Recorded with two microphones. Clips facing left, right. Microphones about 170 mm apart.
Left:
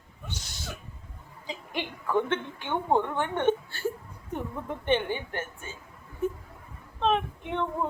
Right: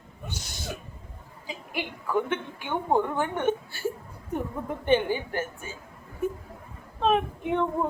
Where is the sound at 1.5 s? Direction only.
10° right (ahead or behind).